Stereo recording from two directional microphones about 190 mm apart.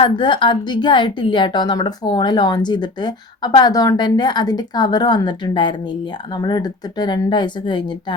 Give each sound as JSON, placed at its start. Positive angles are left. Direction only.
{"t": 0.0, "sound": "a woman's voice", "side_deg": 25}